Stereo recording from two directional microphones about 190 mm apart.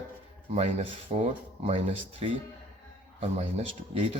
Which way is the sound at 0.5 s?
30° right (ahead or behind).